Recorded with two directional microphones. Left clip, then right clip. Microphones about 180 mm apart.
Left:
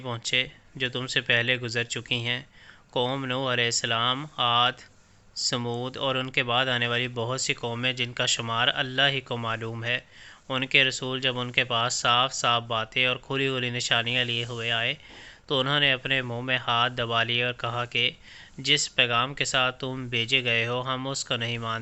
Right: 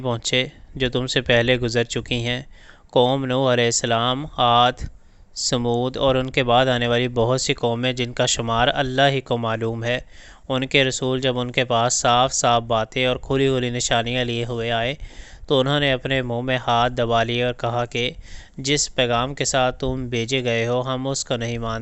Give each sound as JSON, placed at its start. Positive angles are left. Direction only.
{"t": 0.0, "sound": "speech", "side_deg": -45}
{"t": 16.2, "sound": "speech", "side_deg": -25}
{"t": 16.5, "sound": "speech", "side_deg": -45}